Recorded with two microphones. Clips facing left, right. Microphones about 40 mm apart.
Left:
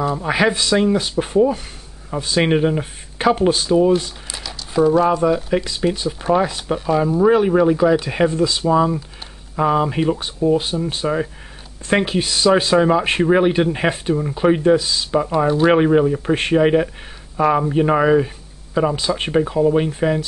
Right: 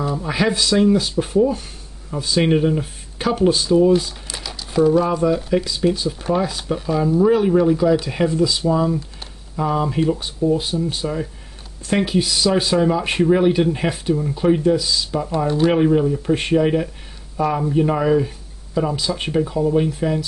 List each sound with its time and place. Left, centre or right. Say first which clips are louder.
0.1 s speech: left 3 dB; left
4.3 s speech: even; centre; by 15.2 s left
15.2 s speech: left 3 dB; centre
15.7 s speech: left 2 dB; left